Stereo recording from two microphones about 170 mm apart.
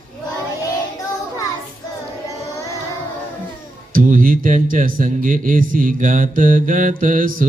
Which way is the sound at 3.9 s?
50° right (ahead or behind).